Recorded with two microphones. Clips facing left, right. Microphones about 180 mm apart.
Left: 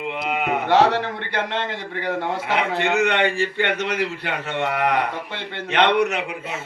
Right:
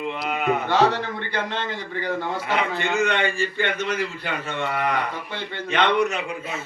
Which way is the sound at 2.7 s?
65° left (ahead or behind).